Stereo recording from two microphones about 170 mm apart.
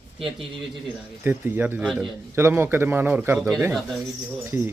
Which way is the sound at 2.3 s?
15° right (ahead or behind).